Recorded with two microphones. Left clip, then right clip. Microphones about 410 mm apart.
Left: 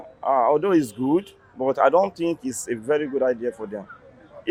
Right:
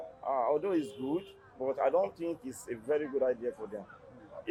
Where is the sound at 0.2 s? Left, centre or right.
Left.